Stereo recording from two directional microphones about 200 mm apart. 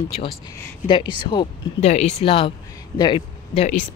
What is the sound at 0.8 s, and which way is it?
Speech, 25° left (ahead or behind).